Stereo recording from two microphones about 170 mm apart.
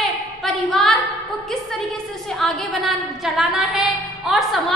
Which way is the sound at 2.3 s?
Centre (ahead or behind).